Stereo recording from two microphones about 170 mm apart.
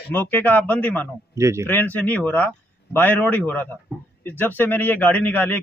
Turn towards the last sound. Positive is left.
turn(degrees=10)  # may be behind; listen again after turning